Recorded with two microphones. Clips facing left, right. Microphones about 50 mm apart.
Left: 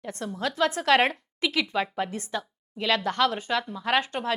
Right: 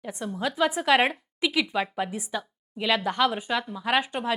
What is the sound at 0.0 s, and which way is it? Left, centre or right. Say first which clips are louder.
A woman's voice: right 1 dB; centre.